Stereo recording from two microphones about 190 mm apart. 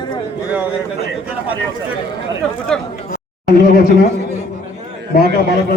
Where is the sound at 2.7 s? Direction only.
5° left (ahead or behind).